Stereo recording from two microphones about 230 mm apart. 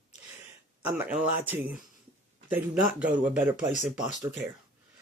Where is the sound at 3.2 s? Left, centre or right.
Centre.